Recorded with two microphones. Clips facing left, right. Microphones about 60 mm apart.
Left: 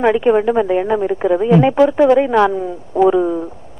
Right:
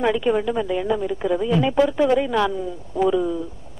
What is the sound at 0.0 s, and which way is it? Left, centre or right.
A woman's voice, left.